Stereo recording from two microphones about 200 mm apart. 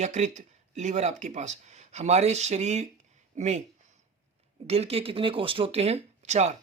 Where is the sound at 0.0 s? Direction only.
35° right (ahead or behind).